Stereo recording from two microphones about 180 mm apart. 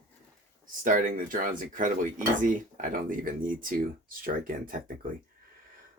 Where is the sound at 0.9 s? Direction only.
45° right (ahead or behind).